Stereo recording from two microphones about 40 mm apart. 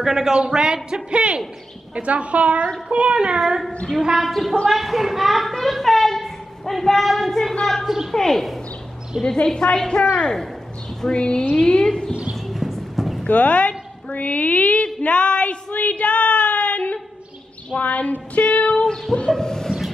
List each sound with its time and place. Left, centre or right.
0.0 s speech: centre
0.8 s a woman's voice: right
3.3 s speech: centre
4.2 s a woman's voice: centre
7.8 s speech: centre
8.1 s speech: centre
9.2 s speech: left
11.1 s speech: left
12.4 s clip-clop: centre
13.3 s a woman's voice: left
15.0 s a sound: left
17.7 s a woman's voice: left
18.4 s music: left
19.3 s speech: centre